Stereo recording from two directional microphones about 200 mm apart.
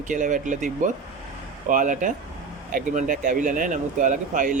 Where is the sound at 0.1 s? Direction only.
40° right (ahead or behind).